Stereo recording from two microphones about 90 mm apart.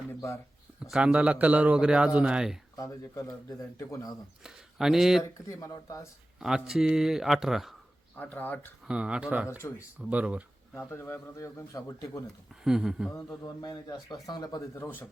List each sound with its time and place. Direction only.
0.8 s speech: 10° right (ahead or behind)
2.7 s a man's voice: 35° left (ahead or behind)
4.4 s speech: 5° right (ahead or behind)
5.5 s a man's voice: 40° left (ahead or behind)
6.4 s speech: 5° right (ahead or behind)
8.1 s speech: 20° left (ahead or behind)
8.9 s speech: 10° right (ahead or behind)
9.5 s a man's voice: 30° left (ahead or behind)
10.0 s speech: 15° right (ahead or behind)
10.8 s a man's voice: 25° left (ahead or behind)
12.6 s speech: 5° right (ahead or behind)
13.1 s a man's voice: 35° left (ahead or behind)
13.6 s a man's voice: 50° left (ahead or behind)
14.8 s speech: 20° left (ahead or behind)